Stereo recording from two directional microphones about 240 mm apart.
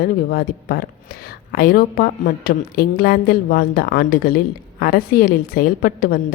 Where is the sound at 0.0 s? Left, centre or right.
Left.